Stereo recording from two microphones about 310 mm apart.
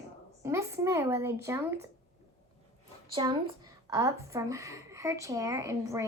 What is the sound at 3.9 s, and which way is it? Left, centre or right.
Speech, centre.